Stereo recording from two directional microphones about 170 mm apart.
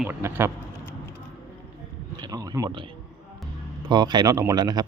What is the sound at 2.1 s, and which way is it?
A man's voice, 25° right (ahead or behind).